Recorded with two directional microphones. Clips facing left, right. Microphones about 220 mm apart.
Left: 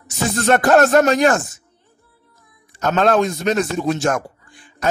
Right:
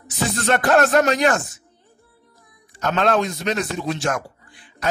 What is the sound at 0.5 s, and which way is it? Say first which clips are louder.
Speech: left 4 dB; 45° left (ahead or behind).